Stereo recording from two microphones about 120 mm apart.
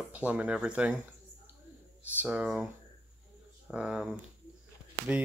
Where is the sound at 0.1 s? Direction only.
10° right (ahead or behind).